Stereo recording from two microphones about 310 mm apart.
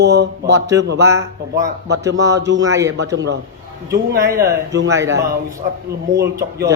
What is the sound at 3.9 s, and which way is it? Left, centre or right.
A man's voice, centre.